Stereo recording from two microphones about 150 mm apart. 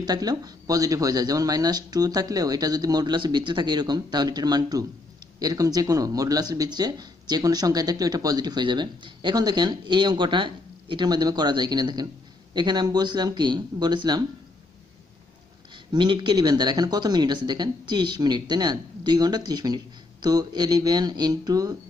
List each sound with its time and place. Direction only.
0.0 s speech: 25° right (ahead or behind)
15.7 s speech: 30° right (ahead or behind)